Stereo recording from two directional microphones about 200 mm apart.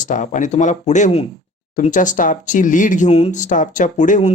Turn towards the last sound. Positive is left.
turn(degrees=35)  # may be behind; listen again after turning